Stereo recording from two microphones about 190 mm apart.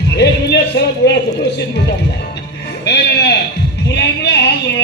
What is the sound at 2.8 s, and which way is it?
Sheep, 60° left (ahead or behind).